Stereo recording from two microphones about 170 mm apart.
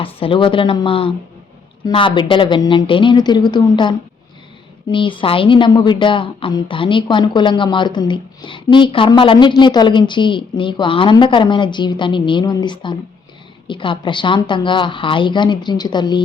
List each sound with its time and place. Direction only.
0.0 s a woman's voice: 30° left (ahead or behind)